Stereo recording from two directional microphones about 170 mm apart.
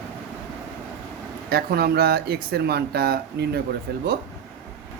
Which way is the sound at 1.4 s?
65° right (ahead or behind).